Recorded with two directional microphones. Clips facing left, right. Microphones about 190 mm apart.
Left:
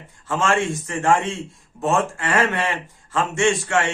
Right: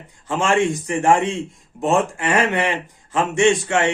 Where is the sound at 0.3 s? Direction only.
15° right (ahead or behind).